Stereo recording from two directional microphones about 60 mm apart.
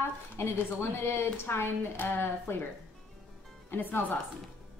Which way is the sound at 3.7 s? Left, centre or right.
Left.